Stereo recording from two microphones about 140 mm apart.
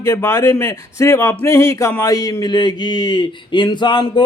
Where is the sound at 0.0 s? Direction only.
20° left (ahead or behind).